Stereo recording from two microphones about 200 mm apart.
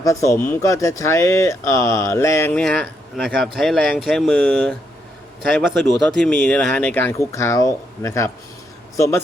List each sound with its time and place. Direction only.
0.0 s speech: 15° left (ahead or behind)